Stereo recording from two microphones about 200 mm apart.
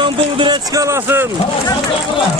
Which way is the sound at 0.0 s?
20° right (ahead or behind).